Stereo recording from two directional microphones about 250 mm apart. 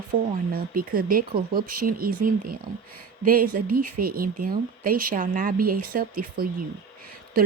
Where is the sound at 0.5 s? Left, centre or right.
Right.